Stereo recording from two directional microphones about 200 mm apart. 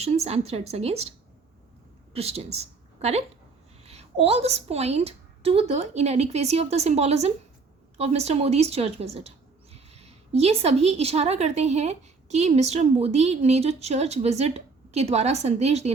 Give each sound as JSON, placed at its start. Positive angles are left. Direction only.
{"t": 0.0, "sound": "a woman's voice", "side_deg": -30}
{"t": 2.1, "sound": "a woman's voice", "side_deg": -30}